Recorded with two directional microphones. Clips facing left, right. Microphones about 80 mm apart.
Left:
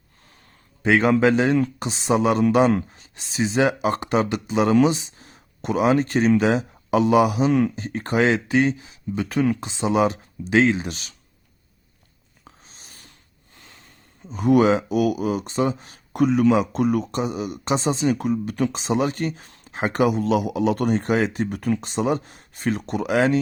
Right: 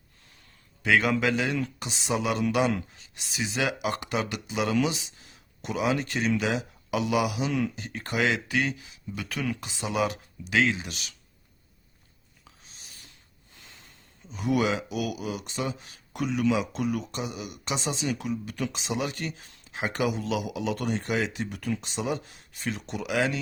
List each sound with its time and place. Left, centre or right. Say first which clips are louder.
0.8 s a man's voice: left 6 dB; left
12.5 s a sound: left 5 dB; left
14.3 s a man's voice: left 9 dB; left